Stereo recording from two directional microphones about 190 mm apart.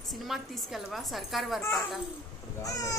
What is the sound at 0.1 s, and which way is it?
Speech, centre (ahead or behind).